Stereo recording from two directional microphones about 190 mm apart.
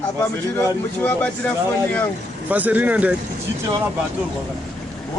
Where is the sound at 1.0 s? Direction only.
10° left (ahead or behind).